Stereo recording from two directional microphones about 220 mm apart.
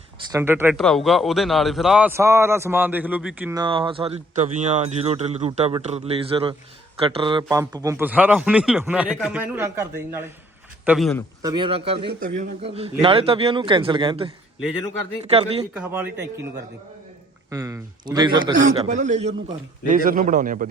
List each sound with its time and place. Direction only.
0.3 s a man's voice: 10° right (ahead or behind)
0.8 s a man's voice: centre (ahead or behind)
3.6 s a man's voice: 20° right (ahead or behind)
10.8 s speech: centre (ahead or behind)
11.4 s speech: 20° right (ahead or behind)
15.3 s speech: 25° right (ahead or behind)
15.7 s a man's voice: 10° right (ahead or behind)
17.5 s a man's voice: 15° right (ahead or behind)
18.6 s speech: 35° right (ahead or behind)